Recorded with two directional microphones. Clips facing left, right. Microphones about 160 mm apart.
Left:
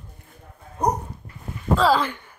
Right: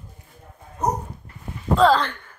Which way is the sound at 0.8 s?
10° left (ahead or behind).